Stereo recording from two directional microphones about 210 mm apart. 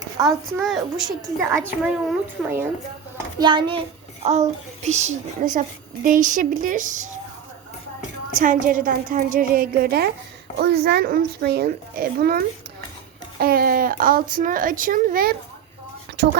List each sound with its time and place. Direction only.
0.6 s a child's voice: centre (ahead or behind)
3.3 s a child's voice: 20° right (ahead or behind); by 7.1 s 40° right (ahead or behind)
8.4 s a child's voice: 40° right (ahead or behind)